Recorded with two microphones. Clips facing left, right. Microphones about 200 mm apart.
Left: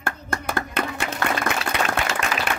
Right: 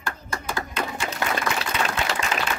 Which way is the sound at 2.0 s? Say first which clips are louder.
Left 2 dB; 65° left (ahead or behind).